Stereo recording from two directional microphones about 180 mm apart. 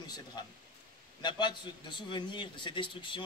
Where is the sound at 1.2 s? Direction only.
25° left (ahead or behind).